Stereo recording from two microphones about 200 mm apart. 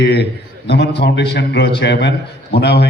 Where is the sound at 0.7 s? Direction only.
55° left (ahead or behind).